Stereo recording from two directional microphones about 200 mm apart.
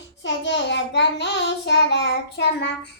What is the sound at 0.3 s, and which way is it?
Child singing, 60° left (ahead or behind).